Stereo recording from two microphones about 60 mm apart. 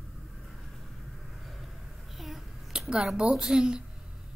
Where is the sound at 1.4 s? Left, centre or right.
Centre.